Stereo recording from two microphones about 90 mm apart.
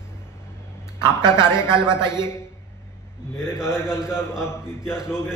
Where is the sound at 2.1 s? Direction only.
30° left (ahead or behind).